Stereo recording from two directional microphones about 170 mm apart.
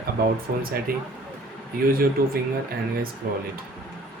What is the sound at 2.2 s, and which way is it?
Speech, 60° right (ahead or behind).